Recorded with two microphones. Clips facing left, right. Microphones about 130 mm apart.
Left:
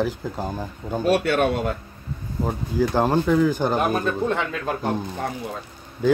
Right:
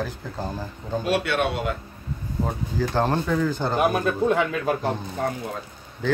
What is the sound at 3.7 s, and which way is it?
Speech, 10° right (ahead or behind).